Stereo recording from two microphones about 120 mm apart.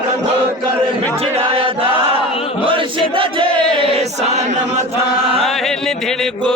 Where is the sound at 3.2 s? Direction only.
45° right (ahead or behind).